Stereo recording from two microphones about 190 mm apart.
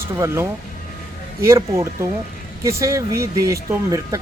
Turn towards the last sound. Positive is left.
turn(degrees=-15)  # may be behind; listen again after turning